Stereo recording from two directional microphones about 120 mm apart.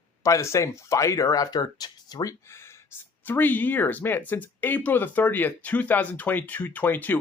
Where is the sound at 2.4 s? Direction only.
20° left (ahead or behind).